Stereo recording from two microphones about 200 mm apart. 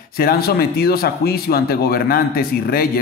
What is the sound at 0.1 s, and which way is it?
Speech, 50° left (ahead or behind).